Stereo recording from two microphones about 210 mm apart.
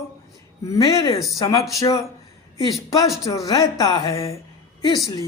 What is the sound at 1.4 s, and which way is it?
Speech, 15° left (ahead or behind).